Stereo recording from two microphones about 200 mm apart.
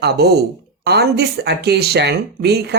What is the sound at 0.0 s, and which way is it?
Speech, 55° right (ahead or behind).